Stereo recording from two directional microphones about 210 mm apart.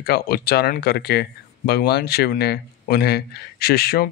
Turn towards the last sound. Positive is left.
turn(degrees=45)  # may be behind; listen again after turning